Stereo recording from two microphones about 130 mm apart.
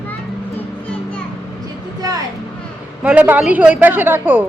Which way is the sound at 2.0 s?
30° right (ahead or behind).